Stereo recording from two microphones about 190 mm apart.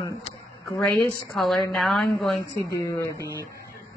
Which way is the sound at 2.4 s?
20° left (ahead or behind).